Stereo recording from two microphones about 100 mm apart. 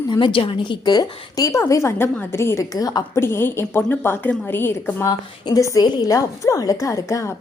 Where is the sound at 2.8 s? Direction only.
40° left (ahead or behind).